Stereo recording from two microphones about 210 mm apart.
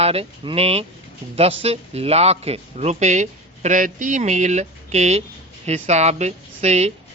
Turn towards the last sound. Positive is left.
turn(degrees=-30)  # may be behind; listen again after turning